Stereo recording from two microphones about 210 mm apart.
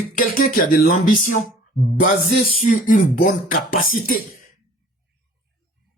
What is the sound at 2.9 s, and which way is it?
Speech, 40° left (ahead or behind).